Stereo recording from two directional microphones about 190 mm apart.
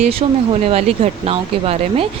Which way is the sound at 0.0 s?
30° right (ahead or behind).